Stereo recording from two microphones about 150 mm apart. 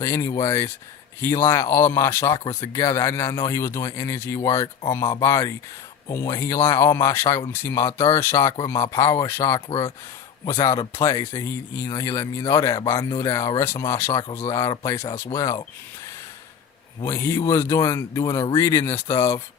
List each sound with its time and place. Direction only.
0.0 s speech: 20° left (ahead or behind)
9.6 s speech: 35° left (ahead or behind)
10.4 s speech: 20° left (ahead or behind)
17.0 s speech: 15° left (ahead or behind)